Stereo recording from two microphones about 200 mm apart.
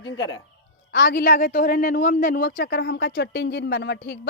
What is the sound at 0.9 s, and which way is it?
Speech, 55° left (ahead or behind).